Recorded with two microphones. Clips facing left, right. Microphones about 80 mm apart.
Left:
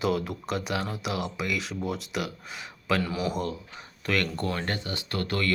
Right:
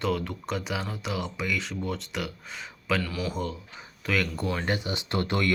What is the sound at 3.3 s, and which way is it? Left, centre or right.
Speech, centre.